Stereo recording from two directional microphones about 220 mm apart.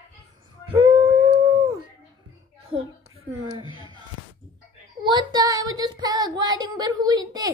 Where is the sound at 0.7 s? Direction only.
20° right (ahead or behind).